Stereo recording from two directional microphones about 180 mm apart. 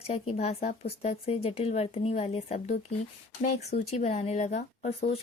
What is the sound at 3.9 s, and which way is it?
Speech, 35° left (ahead or behind).